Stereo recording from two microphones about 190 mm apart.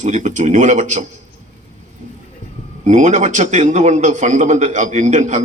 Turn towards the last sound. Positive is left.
turn(degrees=-40)  # may be behind; listen again after turning